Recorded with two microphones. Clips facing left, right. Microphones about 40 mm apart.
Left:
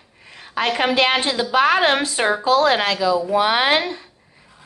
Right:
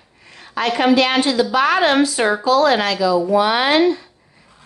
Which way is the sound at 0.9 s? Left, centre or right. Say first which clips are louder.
Right 3 dB; left.